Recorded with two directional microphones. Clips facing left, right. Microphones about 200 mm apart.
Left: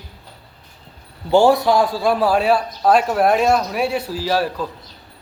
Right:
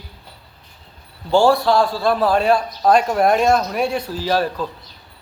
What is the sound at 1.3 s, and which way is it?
A man's voice, 20° left (ahead or behind).